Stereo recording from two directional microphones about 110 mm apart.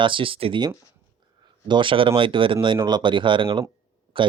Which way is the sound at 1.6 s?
45° right (ahead or behind).